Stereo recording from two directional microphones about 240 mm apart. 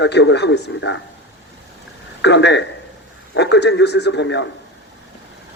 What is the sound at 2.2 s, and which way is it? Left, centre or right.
Speech, left.